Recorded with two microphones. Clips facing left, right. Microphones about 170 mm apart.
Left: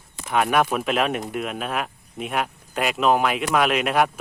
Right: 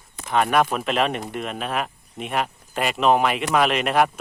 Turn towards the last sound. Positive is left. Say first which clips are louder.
# right 1 dB
turn(degrees=0)  # may be behind; listen again after turning